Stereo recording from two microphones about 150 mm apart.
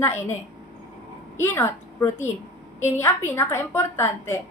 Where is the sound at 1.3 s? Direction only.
15° left (ahead or behind).